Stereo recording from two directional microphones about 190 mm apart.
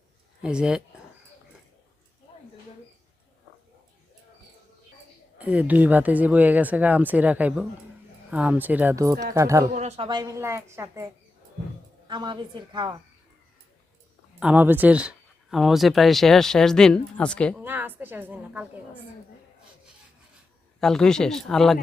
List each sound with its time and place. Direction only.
0.4 s speech: 5° right (ahead or behind)
5.4 s speech: 10° right (ahead or behind)
9.7 s speech: 35° right (ahead or behind)
10.1 s a woman's voice: 20° right (ahead or behind)
14.3 s speech: 5° right (ahead or behind)
17.6 s speech: 10° right (ahead or behind)
20.8 s speech: 5° left (ahead or behind)